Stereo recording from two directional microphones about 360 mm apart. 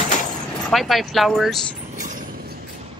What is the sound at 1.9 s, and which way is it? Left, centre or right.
Vehicle, right.